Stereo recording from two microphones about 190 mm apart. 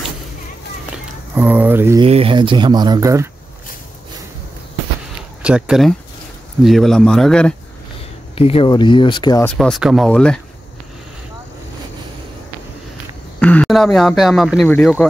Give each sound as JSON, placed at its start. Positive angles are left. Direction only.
{"t": 1.3, "sound": "speech", "side_deg": -10}
{"t": 2.0, "sound": "speech", "side_deg": -30}
{"t": 5.4, "sound": "speech", "side_deg": -5}
{"t": 8.4, "sound": "speech", "side_deg": 30}
{"t": 9.4, "sound": "speech", "side_deg": 0}
{"t": 13.4, "sound": "speech", "side_deg": 5}